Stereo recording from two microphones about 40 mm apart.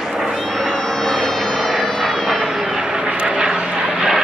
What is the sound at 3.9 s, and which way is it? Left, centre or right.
Vehicle, centre.